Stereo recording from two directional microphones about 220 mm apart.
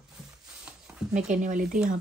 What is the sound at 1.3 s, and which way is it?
Speech, 35° right (ahead or behind).